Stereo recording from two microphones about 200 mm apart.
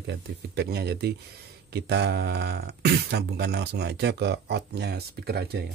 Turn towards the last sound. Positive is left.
turn(degrees=-55)  # may be behind; listen again after turning